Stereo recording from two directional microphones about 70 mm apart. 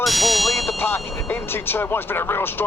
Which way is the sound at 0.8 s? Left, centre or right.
Left.